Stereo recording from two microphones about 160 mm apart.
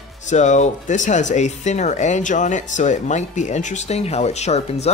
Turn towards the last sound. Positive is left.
turn(degrees=40)  # may be behind; listen again after turning